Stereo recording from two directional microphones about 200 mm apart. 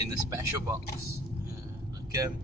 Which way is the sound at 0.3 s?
15° right (ahead or behind).